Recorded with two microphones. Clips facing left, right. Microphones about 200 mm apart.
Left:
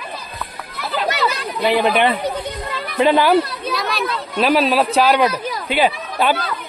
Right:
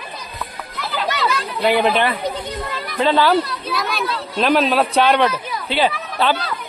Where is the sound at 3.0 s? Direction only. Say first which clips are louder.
Left 2 dB; 15° left (ahead or behind).